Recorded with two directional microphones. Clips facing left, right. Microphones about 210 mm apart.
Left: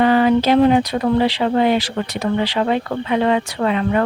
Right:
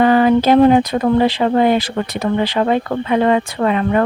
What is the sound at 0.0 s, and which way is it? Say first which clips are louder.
Speech: right 2 dB; 45° right (ahead or behind).